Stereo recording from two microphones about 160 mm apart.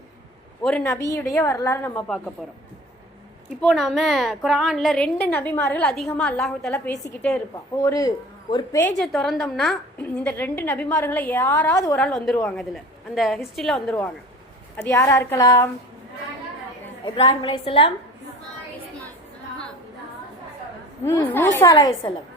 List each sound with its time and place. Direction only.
0.6 s a woman's voice: 5° left (ahead or behind)
0.9 s a woman's voice: 20° left (ahead or behind)
3.6 s a woman's voice: 5° left (ahead or behind)
7.8 s a man's voice: 20° left (ahead or behind)
8.8 s a woman's voice: 5° left (ahead or behind)
10.0 s a woman's voice: 10° left (ahead or behind)
11.9 s a woman's voice: 5° left (ahead or behind); by 15.7 s 20° left (ahead or behind)
17.2 s a woman's voice: 35° left (ahead or behind)
21.0 s a woman's voice: 15° left (ahead or behind)